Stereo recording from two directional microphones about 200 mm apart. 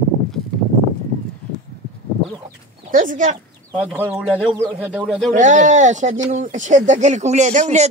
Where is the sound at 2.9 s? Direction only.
40° right (ahead or behind).